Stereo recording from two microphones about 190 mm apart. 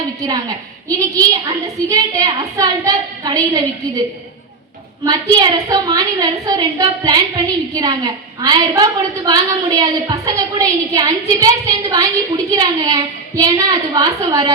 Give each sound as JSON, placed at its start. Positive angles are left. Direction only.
{"t": 0.2, "sound": "a woman's voice", "side_deg": -20}
{"t": 5.0, "sound": "a woman's voice", "side_deg": -20}